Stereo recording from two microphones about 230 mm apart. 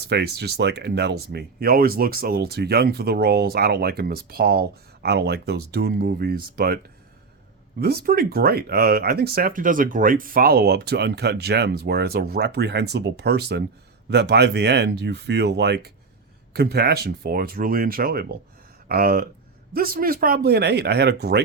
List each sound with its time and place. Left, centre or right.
0.1 s speech: right
7.8 s speech: right